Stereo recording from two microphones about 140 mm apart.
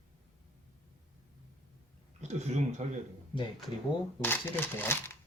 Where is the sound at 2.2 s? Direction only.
50° right (ahead or behind).